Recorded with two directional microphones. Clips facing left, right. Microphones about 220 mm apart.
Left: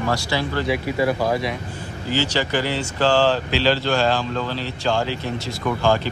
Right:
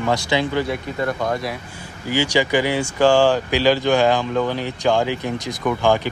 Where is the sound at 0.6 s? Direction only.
5° left (ahead or behind).